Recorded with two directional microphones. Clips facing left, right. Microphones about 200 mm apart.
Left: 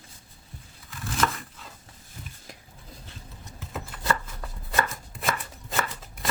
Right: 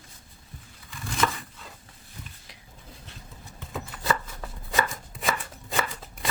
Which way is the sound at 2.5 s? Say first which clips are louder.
Left 6 dB; 45° left (ahead or behind).